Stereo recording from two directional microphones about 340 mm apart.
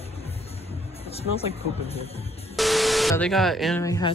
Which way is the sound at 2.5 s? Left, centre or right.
Centre.